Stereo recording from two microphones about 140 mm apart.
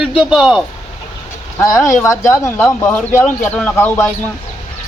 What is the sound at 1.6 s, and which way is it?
Speech, 25° left (ahead or behind).